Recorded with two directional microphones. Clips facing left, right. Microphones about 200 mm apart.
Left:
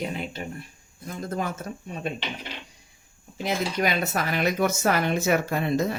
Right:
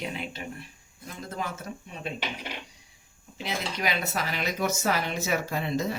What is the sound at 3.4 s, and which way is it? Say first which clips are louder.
Speech: left 6 dB; 50° left (ahead or behind).